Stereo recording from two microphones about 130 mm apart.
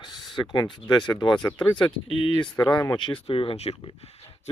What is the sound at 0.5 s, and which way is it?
Speech, 35° left (ahead or behind).